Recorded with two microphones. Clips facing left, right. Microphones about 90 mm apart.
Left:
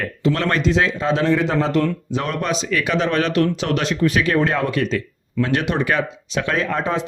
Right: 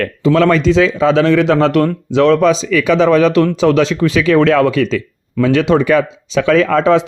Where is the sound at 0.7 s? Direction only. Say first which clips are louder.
Right 7 dB; 90° right.